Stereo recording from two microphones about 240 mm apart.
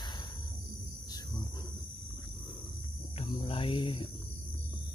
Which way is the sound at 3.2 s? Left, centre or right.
Left.